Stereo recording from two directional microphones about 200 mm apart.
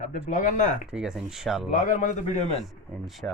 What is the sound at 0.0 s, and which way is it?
Speech, 40° left (ahead or behind).